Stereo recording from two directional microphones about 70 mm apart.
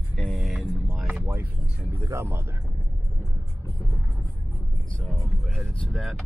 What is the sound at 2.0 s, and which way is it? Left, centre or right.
Speech, right.